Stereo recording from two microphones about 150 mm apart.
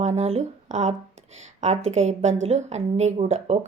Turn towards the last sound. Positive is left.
turn(degrees=-45)  # may be behind; listen again after turning